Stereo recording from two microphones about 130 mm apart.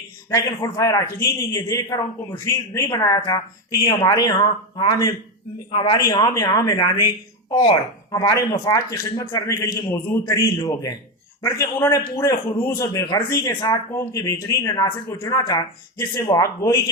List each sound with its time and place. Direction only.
0.3 s a man's voice: 25° left (ahead or behind)
8.1 s a man's voice: 25° left (ahead or behind)